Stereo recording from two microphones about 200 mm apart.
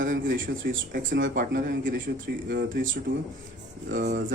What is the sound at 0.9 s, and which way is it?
Speech, 60° right (ahead or behind).